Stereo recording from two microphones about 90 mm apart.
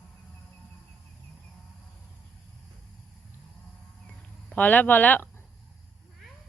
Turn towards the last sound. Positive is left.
turn(degrees=20)  # may be behind; listen again after turning